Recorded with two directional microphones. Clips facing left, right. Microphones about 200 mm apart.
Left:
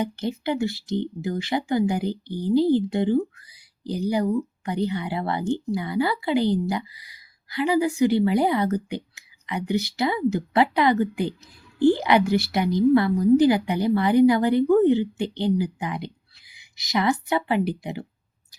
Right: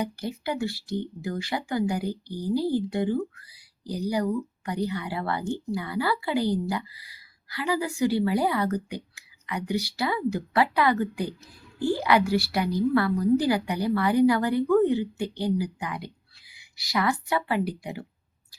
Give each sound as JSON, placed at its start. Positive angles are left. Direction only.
{"t": 0.0, "sound": "speech", "side_deg": 25}